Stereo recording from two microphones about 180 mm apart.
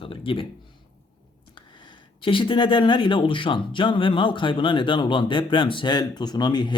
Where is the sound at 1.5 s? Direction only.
25° left (ahead or behind).